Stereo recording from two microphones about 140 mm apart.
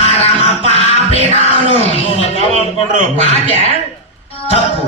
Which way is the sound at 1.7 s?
45° left (ahead or behind).